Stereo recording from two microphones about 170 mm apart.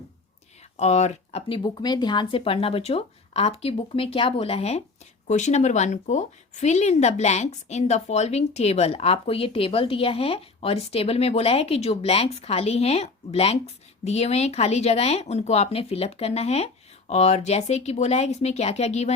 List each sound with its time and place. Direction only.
0.8 s a woman's voice: 40° left (ahead or behind)